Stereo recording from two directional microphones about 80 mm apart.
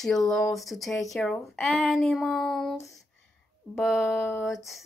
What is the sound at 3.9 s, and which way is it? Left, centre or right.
Speech, left.